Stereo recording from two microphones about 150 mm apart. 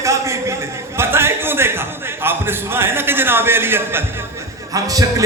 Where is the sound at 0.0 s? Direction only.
20° right (ahead or behind).